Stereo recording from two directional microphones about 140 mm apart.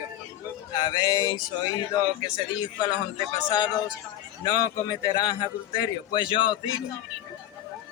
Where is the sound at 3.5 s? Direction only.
30° left (ahead or behind).